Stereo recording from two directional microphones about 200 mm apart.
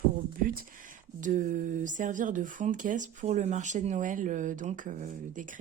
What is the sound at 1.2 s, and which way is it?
Speech, 40° right (ahead or behind).